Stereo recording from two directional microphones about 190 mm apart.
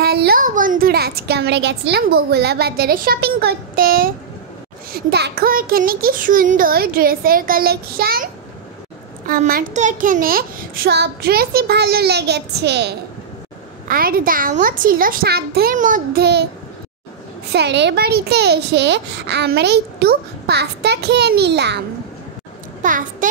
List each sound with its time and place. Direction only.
0.0 s a child's voice: 55° right (ahead or behind)
9.3 s a child's voice: 50° right (ahead or behind)
13.8 s a child's voice: 50° right (ahead or behind)
17.5 s a child's voice: 60° right (ahead or behind)
22.8 s a child's voice: 45° right (ahead or behind)